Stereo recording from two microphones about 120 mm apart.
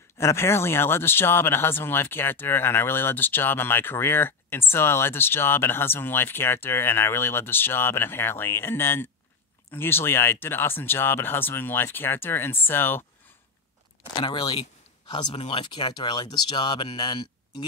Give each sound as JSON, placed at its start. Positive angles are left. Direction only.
{"t": 0.2, "sound": "speech", "side_deg": 20}
{"t": 14.1, "sound": "speech", "side_deg": 40}